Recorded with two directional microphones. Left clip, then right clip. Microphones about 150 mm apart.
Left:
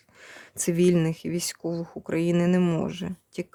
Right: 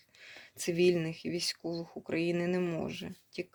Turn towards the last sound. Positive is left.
turn(degrees=55)  # may be behind; listen again after turning